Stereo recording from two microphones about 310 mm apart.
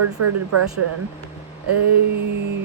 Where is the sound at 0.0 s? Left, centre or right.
Right.